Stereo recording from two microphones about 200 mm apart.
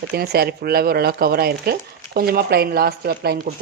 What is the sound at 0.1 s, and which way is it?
Speech, 50° right (ahead or behind).